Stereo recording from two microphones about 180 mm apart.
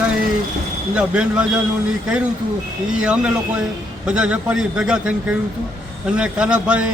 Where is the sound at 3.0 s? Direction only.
5° right (ahead or behind).